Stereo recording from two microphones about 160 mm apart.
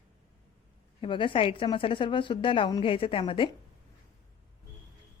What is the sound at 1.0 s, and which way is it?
Speech, 30° left (ahead or behind).